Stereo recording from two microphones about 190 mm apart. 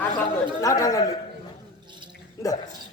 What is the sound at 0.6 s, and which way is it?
Speech, 15° left (ahead or behind).